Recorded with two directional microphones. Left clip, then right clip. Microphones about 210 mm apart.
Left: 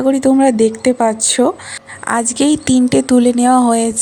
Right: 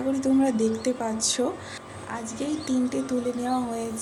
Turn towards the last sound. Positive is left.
turn(degrees=50)  # may be behind; listen again after turning